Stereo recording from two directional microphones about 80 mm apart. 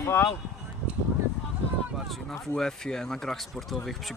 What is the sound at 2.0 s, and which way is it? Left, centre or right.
Speech, centre.